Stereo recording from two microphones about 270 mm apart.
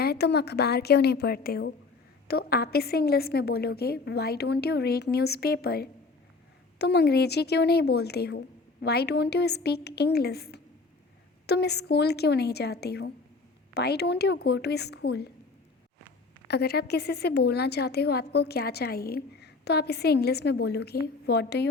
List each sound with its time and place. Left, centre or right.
0.0 s a woman's voice: left
16.5 s a woman's voice: left